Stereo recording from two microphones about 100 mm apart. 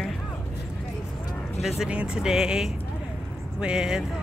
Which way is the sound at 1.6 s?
5° right (ahead or behind).